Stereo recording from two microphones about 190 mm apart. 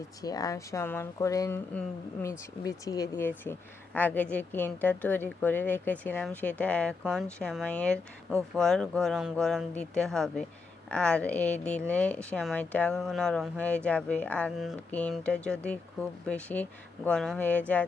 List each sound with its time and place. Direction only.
0.2 s speech: 20° left (ahead or behind)